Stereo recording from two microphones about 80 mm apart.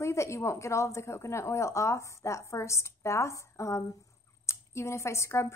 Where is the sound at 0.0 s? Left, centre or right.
Left.